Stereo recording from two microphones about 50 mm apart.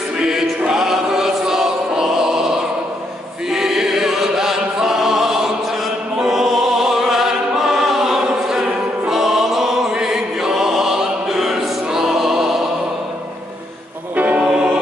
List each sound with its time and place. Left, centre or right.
0.2 s choir: centre
3.4 s chant: centre
6.1 s music: centre
14.1 s music: right
14.4 s music: centre